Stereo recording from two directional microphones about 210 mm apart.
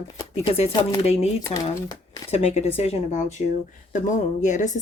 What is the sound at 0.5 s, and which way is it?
A woman's voice, 25° left (ahead or behind).